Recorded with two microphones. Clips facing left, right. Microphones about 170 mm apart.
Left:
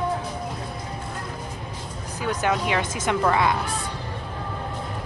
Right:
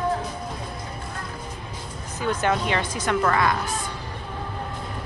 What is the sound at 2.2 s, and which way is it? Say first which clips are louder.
Speech: right 1 dB; 5° left (ahead or behind).